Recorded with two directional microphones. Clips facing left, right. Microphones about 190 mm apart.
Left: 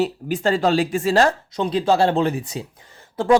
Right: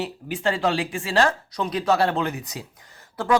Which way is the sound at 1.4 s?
25° left (ahead or behind).